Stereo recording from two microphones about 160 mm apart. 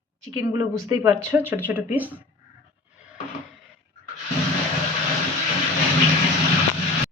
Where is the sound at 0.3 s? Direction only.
25° right (ahead or behind).